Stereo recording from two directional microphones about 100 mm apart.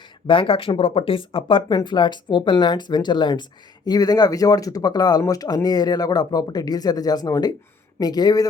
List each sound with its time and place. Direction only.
0.3 s speech: 60° left (ahead or behind)
1.7 s speech: 45° left (ahead or behind)